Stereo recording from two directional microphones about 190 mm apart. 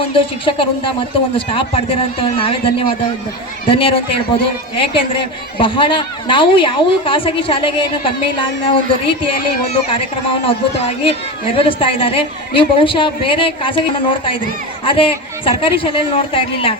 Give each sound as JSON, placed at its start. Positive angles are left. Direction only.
{"t": 0.0, "sound": "a man's voice", "side_deg": 25}
{"t": 14.8, "sound": "a man's voice", "side_deg": 30}